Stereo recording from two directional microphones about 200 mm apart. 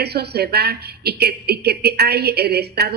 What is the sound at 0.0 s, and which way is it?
A woman's voice, 55° right (ahead or behind).